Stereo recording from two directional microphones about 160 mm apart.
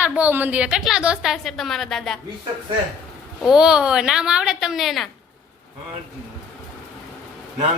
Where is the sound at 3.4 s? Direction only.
5° right (ahead or behind).